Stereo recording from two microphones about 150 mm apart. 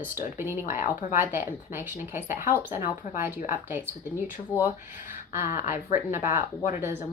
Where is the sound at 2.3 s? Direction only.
65° left (ahead or behind).